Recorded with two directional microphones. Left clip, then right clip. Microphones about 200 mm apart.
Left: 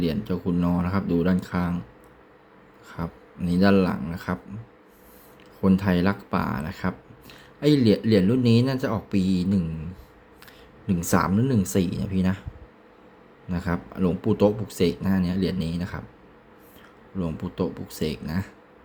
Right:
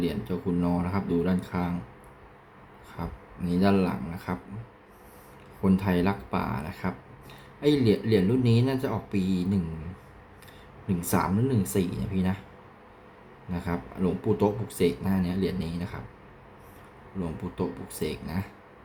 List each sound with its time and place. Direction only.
0.0 s speech: 30° left (ahead or behind)
2.9 s speech: 30° left (ahead or behind)
5.6 s speech: 30° left (ahead or behind)
10.8 s speech: 30° left (ahead or behind)
13.5 s speech: 30° left (ahead or behind)
17.2 s speech: 25° left (ahead or behind)